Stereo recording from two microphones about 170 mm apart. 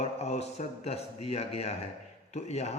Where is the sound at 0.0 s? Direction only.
40° left (ahead or behind).